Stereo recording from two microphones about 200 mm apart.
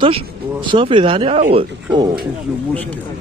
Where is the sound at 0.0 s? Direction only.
25° right (ahead or behind).